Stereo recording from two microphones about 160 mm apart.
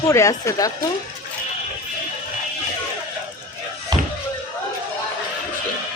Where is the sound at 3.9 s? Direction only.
25° right (ahead or behind).